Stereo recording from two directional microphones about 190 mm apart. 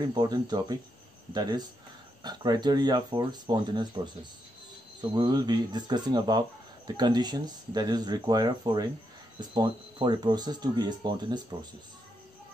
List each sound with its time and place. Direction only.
0.0 s speech: 20° right (ahead or behind)
5.1 s speech: 20° right (ahead or behind)